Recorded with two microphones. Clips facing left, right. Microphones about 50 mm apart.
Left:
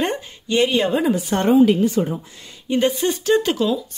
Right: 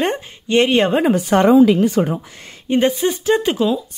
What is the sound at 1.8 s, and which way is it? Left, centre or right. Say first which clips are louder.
Speech: right 3 dB; right.